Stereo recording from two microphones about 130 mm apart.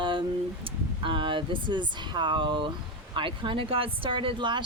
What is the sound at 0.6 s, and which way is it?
Speech, 40° right (ahead or behind).